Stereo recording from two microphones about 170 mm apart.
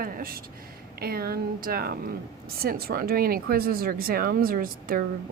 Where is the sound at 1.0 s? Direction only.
65° right (ahead or behind).